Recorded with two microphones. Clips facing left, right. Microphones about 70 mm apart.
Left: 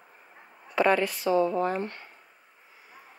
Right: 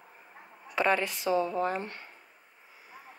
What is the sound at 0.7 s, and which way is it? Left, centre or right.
Speech, centre.